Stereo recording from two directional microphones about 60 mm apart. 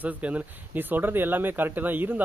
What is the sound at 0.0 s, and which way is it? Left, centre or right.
Speech, right.